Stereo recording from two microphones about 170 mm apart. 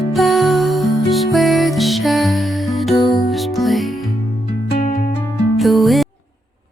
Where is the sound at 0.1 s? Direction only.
Centre (ahead or behind).